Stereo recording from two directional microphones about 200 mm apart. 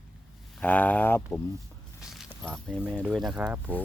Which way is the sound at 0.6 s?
10° left (ahead or behind).